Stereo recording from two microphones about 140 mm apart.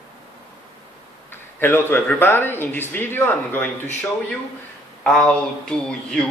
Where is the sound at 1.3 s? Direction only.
15° left (ahead or behind).